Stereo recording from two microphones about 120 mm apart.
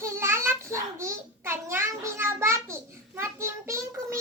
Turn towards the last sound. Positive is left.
turn(degrees=-25)  # may be behind; listen again after turning